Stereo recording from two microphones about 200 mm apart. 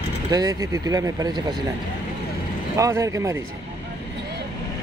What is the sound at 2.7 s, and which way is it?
Speech, 15° right (ahead or behind).